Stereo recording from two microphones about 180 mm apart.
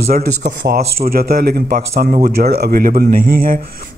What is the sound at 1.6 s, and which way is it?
A man's voice, 50° right (ahead or behind).